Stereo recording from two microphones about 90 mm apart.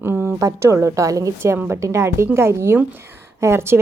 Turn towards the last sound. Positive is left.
turn(degrees=-30)  # may be behind; listen again after turning